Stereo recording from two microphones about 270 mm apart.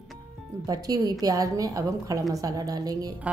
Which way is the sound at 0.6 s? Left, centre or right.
Centre.